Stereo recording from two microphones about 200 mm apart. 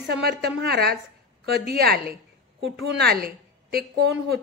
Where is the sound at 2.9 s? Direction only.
50° right (ahead or behind).